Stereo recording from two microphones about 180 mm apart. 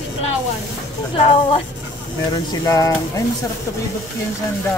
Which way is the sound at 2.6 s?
15° left (ahead or behind).